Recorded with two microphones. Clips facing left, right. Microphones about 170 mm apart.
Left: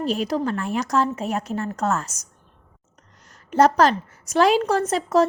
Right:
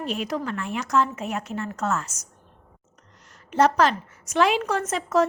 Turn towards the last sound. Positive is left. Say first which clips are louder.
# left 3 dB
turn(degrees=35)  # may be behind; listen again after turning